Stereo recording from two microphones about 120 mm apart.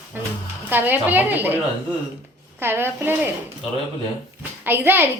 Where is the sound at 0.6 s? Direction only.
15° right (ahead or behind).